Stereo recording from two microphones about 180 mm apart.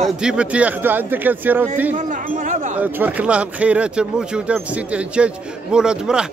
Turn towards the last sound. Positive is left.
turn(degrees=-5)  # may be behind; listen again after turning